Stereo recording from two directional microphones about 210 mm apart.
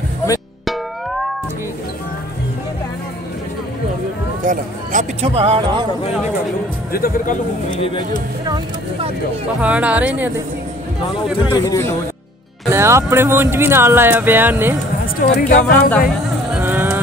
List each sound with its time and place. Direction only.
4.5 s speech: 35° right (ahead or behind)
6.9 s speech: 45° left (ahead or behind)
7.8 s speech: 25° left (ahead or behind)
9.6 s speech: 5° right (ahead or behind)
11.5 s speech: 15° left (ahead or behind)
12.6 s speech: 15° right (ahead or behind)
15.1 s speech: 40° left (ahead or behind)
16.5 s vehicle: 10° right (ahead or behind)